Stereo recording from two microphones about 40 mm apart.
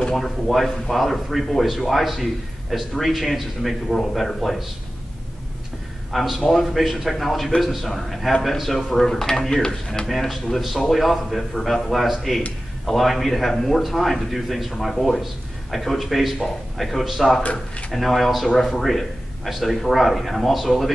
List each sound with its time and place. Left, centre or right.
0.1 s a man's voice: centre
6.1 s a man's voice: centre
10.0 s a man's voice: centre
17.4 s speech: left
17.9 s a man's voice: centre